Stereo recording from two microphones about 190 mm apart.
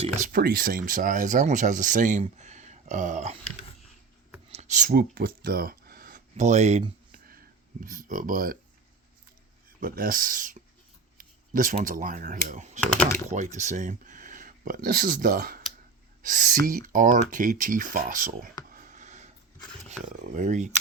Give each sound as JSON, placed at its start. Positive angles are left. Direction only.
{"t": 0.0, "sound": "speech", "side_deg": -45}
{"t": 4.9, "sound": "speech", "side_deg": -50}
{"t": 7.3, "sound": "a sound", "side_deg": -50}
{"t": 9.6, "sound": "speech", "side_deg": -50}
{"t": 12.8, "sound": "speech", "side_deg": 10}
{"t": 13.3, "sound": "speech", "side_deg": -40}
{"t": 18.7, "sound": "a sound", "side_deg": -45}
{"t": 20.3, "sound": "speech", "side_deg": -40}